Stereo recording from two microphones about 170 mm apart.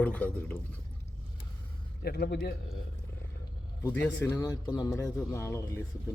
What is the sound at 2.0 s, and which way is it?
Speech, 70° left (ahead or behind).